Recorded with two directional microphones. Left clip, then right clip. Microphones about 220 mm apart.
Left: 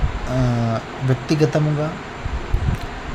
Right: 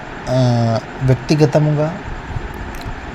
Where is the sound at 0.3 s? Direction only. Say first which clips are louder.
Right 6 dB; 15° right (ahead or behind).